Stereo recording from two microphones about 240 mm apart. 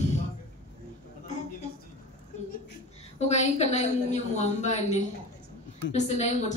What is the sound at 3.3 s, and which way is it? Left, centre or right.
A woman's voice, left.